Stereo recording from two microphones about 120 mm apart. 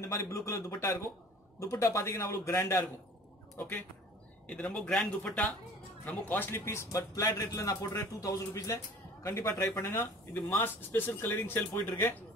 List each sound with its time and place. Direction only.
0.0 s a man's voice: 25° left (ahead or behind)